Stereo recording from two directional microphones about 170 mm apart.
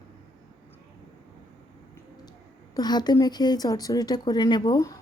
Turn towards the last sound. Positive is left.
turn(degrees=25)  # may be behind; listen again after turning